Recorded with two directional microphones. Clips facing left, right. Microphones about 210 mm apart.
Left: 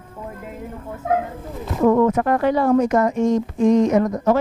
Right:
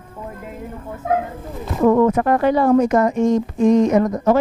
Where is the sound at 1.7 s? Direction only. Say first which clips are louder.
Right 1 dB; 25° right (ahead or behind).